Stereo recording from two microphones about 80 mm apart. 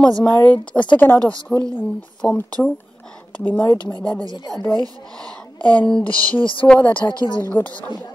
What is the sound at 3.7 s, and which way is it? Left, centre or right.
Speech, left.